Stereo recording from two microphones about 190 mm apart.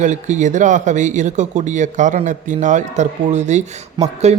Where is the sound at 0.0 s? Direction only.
40° right (ahead or behind).